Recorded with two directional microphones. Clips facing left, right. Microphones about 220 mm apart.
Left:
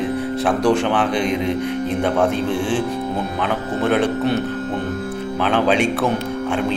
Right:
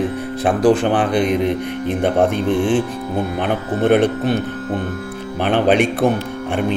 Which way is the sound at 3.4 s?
55° right (ahead or behind).